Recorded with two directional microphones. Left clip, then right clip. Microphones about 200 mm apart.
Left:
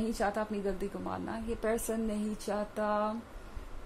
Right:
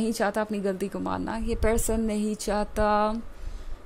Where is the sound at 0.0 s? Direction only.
45° right (ahead or behind).